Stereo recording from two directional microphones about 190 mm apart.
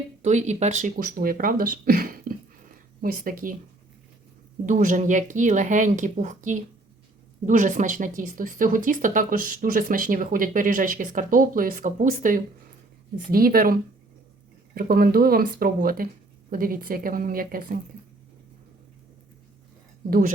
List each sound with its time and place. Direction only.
0.2 s speech: 40° right (ahead or behind)
4.6 s speech: 45° right (ahead or behind)
14.8 s speech: 50° right (ahead or behind)
20.1 s speech: 50° right (ahead or behind)